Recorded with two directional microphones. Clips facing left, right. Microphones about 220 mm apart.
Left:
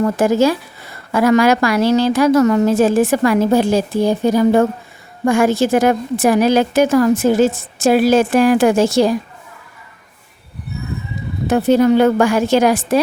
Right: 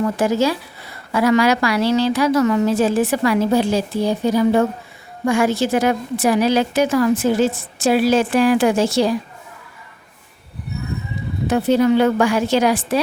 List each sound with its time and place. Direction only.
0.0 s a woman's voice: 45° left (ahead or behind)
11.4 s a woman's voice: 45° left (ahead or behind)